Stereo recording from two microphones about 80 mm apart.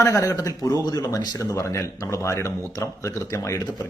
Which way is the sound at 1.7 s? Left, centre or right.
Left.